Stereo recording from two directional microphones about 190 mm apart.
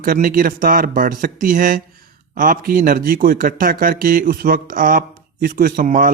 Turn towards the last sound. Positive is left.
turn(degrees=-45)  # may be behind; listen again after turning